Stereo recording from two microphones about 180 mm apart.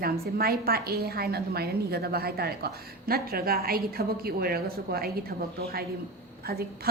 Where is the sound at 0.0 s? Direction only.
55° right (ahead or behind).